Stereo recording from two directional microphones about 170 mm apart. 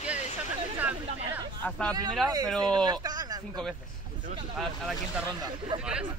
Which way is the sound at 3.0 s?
25° right (ahead or behind).